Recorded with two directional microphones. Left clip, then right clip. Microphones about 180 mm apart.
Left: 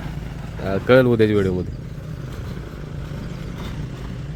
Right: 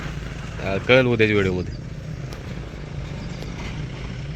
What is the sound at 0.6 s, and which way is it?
Speech, 40° left (ahead or behind).